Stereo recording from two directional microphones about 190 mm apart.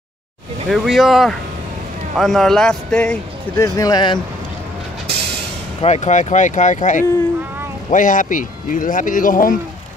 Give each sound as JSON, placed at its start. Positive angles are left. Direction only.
{"t": 0.7, "sound": "speech", "side_deg": 0}
{"t": 5.8, "sound": "speech", "side_deg": 35}